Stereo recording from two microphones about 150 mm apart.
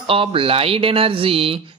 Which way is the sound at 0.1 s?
35° right (ahead or behind).